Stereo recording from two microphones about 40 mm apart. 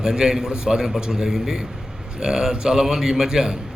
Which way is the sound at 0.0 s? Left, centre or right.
Centre.